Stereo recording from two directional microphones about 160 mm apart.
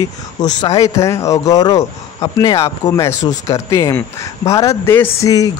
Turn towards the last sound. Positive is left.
turn(degrees=20)  # may be behind; listen again after turning